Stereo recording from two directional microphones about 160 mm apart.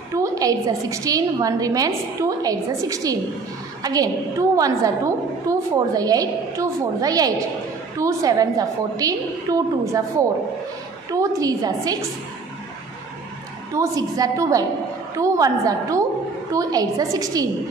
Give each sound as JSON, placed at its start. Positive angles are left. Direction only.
{"t": 0.1, "sound": "a woman's voice", "side_deg": -20}
{"t": 13.7, "sound": "a woman's voice", "side_deg": -20}